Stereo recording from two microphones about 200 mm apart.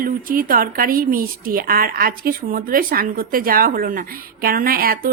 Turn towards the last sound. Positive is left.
turn(degrees=-45)  # may be behind; listen again after turning